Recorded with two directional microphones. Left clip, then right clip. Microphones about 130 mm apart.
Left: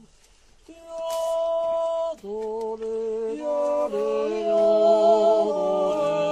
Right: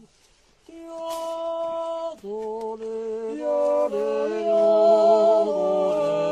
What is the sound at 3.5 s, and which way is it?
Music, 45° right (ahead or behind).